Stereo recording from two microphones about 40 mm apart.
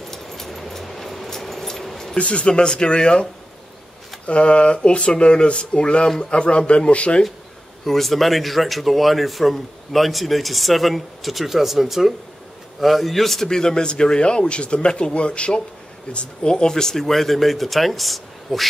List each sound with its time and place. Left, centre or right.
0.1 s a sound: centre
2.1 s speech: left
2.4 s a man's voice: left
4.3 s a man's voice: left
7.8 s a man's voice: centre